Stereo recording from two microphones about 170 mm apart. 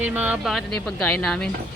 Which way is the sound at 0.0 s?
10° right (ahead or behind).